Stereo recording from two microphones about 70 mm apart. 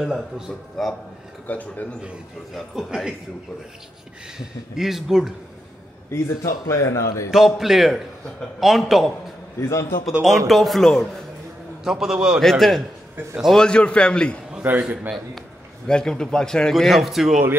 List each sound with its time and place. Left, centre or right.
0.8 s a man's voice: centre
1.5 s a man's voice: left
2.5 s a man's voice: centre
4.7 s a man's voice: centre
6.0 s a man's voice: left
7.2 s a man's voice: centre
9.6 s a man's voice: left
10.2 s a man's voice: centre
11.8 s a man's voice: centre
12.4 s a man's voice: centre
14.8 s a man's voice: centre
15.9 s a man's voice: centre